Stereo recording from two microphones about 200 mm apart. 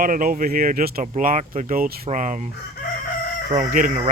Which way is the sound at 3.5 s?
40° right (ahead or behind).